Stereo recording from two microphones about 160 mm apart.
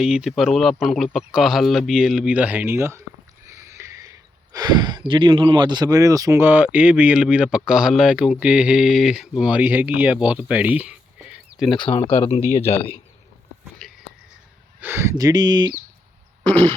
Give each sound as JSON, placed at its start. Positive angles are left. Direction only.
{"t": 0.0, "sound": "speech", "side_deg": -5}
{"t": 11.8, "sound": "speech", "side_deg": 30}
{"t": 12.3, "sound": "speech", "side_deg": 45}
{"t": 13.8, "sound": "a sound", "side_deg": 0}
{"t": 14.8, "sound": "speech", "side_deg": -15}